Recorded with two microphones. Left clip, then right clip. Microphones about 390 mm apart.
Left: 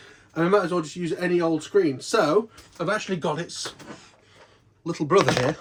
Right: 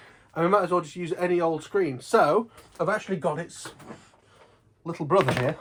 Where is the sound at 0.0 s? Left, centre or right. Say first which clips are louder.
Left 1 dB; centre.